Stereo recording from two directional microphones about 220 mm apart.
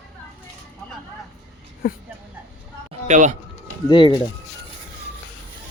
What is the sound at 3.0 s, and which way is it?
Speech, 35° right (ahead or behind).